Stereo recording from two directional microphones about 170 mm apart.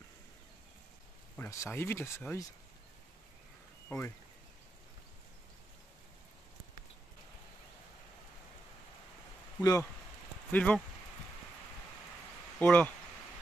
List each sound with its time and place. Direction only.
1.3 s speech: 15° left (ahead or behind)
3.9 s speech: 15° left (ahead or behind)
9.6 s speech: 20° left (ahead or behind)
10.5 s speech: 10° left (ahead or behind)
12.5 s speech: 10° left (ahead or behind)